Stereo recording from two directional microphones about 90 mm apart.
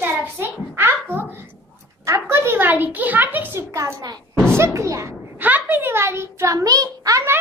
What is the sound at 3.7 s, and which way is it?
A child's voice, 40° right (ahead or behind).